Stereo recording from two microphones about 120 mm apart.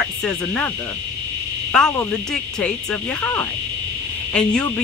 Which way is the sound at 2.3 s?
5° left (ahead or behind).